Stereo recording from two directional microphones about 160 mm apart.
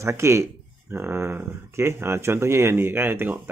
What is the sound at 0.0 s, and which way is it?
Speech, 20° right (ahead or behind).